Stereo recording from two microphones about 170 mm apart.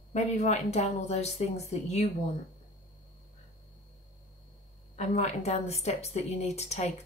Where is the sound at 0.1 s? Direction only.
40° left (ahead or behind).